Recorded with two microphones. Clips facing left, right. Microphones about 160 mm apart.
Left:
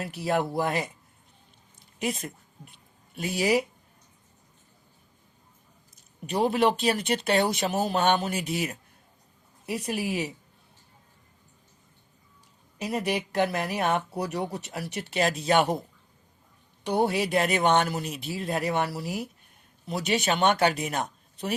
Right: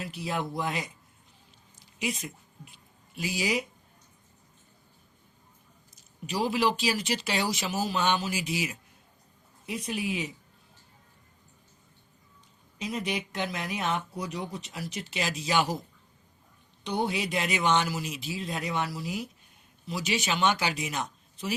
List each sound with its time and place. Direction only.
0.2 s speech: 60° left (ahead or behind)
3.2 s speech: 55° left (ahead or behind)
6.2 s speech: 55° left (ahead or behind)
12.8 s speech: 65° left (ahead or behind)
16.8 s speech: 65° left (ahead or behind)